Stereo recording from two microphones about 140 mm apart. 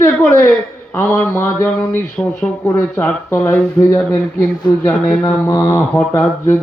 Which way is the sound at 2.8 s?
20° left (ahead or behind).